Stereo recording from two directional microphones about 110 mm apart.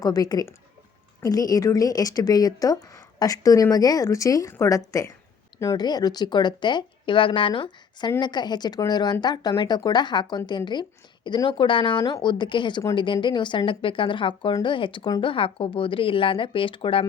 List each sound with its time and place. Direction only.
0.0 s a woman's voice: 35° left (ahead or behind)
5.8 s a woman's voice: 40° left (ahead or behind); by 17.1 s 55° left (ahead or behind)